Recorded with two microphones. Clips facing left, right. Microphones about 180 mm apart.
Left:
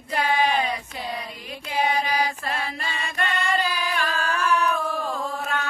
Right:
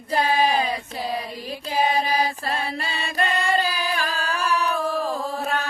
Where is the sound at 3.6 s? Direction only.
35° right (ahead or behind).